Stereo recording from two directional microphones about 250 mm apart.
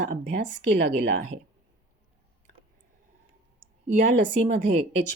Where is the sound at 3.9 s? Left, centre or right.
Right.